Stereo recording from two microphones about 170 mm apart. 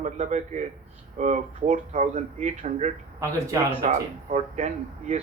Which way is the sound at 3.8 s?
40° right (ahead or behind).